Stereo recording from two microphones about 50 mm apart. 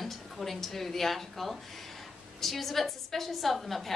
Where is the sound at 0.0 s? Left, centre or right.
Centre.